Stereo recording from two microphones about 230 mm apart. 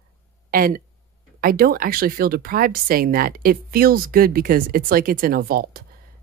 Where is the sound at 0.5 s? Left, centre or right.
Right.